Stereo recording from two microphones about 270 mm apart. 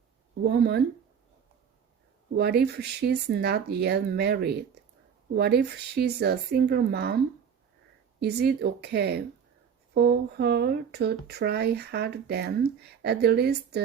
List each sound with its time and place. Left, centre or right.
0.4 s speech: right
2.3 s speech: right
8.2 s speech: right